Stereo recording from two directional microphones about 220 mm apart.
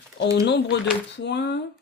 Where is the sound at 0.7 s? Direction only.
50° left (ahead or behind).